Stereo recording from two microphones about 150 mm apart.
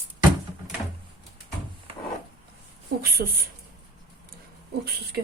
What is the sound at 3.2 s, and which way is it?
Speech, 90° right.